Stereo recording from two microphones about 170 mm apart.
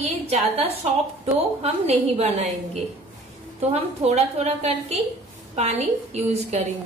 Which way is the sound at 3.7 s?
40° right (ahead or behind).